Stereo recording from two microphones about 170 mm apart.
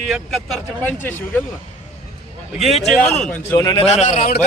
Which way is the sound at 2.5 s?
Centre (ahead or behind).